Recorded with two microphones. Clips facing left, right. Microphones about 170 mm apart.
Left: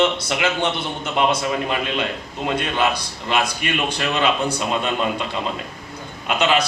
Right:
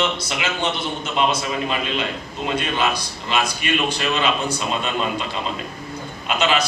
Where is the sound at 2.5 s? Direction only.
60° left (ahead or behind).